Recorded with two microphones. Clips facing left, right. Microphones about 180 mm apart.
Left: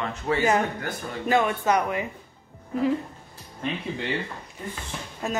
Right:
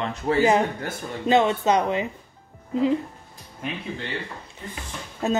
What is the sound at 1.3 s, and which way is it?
Speech, 20° right (ahead or behind).